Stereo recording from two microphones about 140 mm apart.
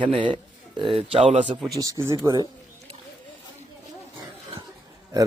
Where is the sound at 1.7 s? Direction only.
25° right (ahead or behind).